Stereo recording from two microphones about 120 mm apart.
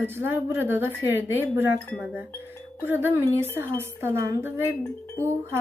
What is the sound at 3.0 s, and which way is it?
A woman's voice, 20° right (ahead or behind).